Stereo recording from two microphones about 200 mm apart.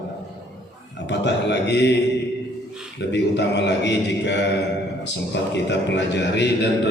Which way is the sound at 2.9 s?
60° left (ahead or behind).